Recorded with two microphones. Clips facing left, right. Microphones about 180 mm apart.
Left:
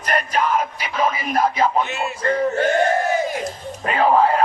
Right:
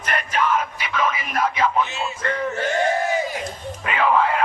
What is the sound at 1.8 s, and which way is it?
Music, 60° left (ahead or behind).